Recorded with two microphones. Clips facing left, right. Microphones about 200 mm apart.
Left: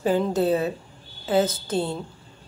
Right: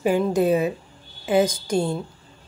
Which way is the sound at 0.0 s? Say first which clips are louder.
Right 2 dB; 15° right (ahead or behind).